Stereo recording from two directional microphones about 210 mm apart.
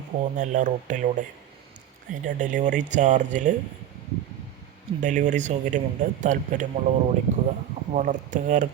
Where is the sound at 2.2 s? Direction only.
35° right (ahead or behind).